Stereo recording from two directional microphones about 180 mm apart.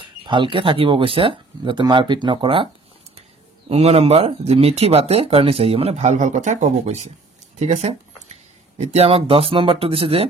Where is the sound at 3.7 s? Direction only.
35° right (ahead or behind).